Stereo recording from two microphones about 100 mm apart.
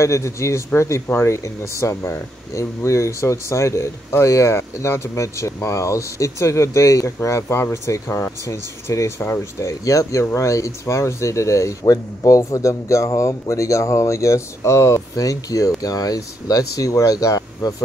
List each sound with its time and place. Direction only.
0.0 s speech: 30° left (ahead or behind)